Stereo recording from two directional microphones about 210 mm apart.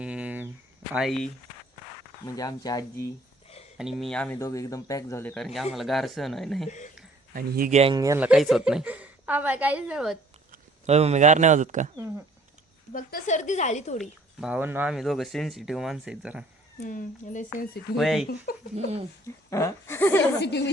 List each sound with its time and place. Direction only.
0.0 s a sound: 5° right (ahead or behind)
0.9 s speech: centre (ahead or behind)
2.2 s speech: 15° left (ahead or behind)
3.8 s speech: centre (ahead or behind)
6.7 s speech: 35° left (ahead or behind)
7.3 s speech: 45° right (ahead or behind)
7.8 s a woman's voice: 20° right (ahead or behind); by 10.2 s 5° right (ahead or behind)
10.5 s speech: 30° right (ahead or behind)
12.9 s a woman's voice: 45° left (ahead or behind)
14.0 s speech: 5° right (ahead or behind)
16.8 s a woman's voice: 40° left (ahead or behind)
17.9 s speech: centre (ahead or behind)
18.5 s speech: 45° left (ahead or behind)
19.5 s speech: 15° left (ahead or behind)